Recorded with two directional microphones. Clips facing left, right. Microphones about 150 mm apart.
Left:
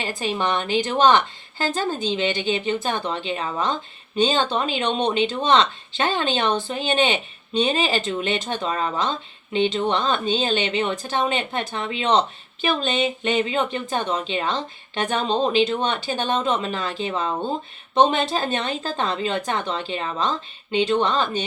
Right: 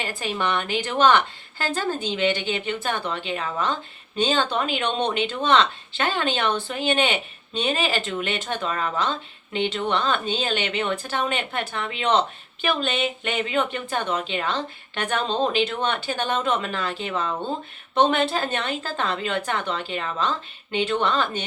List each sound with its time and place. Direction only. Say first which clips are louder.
0.0 s speech: left 2 dB; 20° left (ahead or behind)